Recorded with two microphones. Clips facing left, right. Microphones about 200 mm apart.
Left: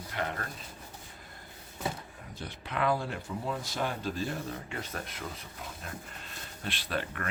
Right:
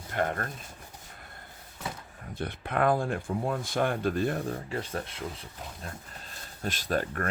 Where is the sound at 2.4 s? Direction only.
55° right (ahead or behind).